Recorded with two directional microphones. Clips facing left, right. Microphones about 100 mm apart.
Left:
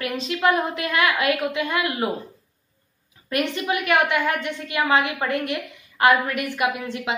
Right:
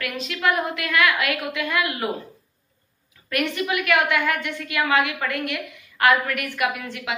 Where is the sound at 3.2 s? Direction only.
25° left (ahead or behind).